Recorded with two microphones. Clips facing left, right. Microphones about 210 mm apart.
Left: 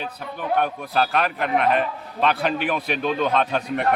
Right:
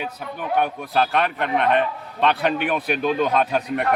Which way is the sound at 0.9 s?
Centre (ahead or behind).